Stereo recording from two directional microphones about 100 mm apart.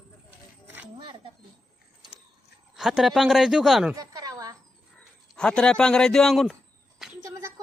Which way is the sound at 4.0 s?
35° right (ahead or behind).